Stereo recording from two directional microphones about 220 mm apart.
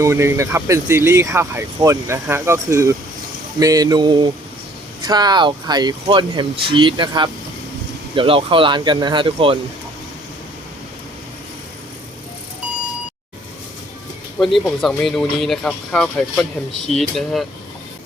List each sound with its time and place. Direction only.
0.0 s speech: 10° right (ahead or behind)
14.3 s speech: centre (ahead or behind)